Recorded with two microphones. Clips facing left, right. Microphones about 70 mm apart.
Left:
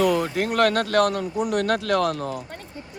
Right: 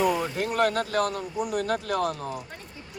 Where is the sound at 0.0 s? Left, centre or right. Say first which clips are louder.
Left 4 dB; left.